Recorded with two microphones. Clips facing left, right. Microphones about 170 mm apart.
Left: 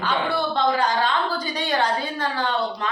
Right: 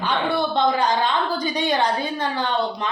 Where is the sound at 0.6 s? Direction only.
20° right (ahead or behind).